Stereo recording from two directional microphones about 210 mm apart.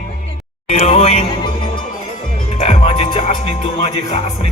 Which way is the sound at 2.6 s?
25° left (ahead or behind).